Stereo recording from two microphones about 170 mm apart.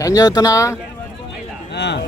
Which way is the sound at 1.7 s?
85° left.